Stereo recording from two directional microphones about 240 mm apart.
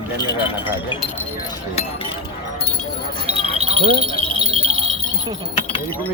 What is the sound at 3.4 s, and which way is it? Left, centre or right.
Wind chime, right.